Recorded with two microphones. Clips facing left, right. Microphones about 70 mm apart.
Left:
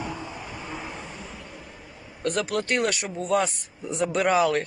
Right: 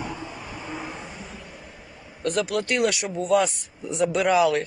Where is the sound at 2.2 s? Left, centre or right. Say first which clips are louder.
Right 1 dB; left.